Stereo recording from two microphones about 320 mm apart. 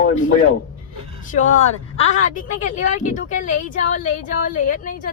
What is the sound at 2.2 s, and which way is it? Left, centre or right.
Speech, left.